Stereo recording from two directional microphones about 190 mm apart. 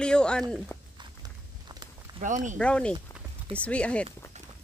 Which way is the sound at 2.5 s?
5° left (ahead or behind).